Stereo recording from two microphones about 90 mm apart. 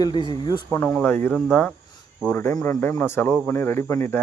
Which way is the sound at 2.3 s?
25° left (ahead or behind).